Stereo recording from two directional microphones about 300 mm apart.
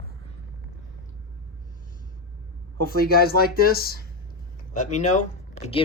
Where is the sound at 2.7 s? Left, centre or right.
Left.